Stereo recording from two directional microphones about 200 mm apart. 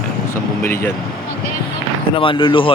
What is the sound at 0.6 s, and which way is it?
Speech, 10° left (ahead or behind).